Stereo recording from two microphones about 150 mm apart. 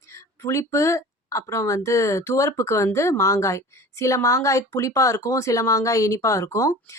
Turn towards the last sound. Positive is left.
turn(degrees=20)  # may be behind; listen again after turning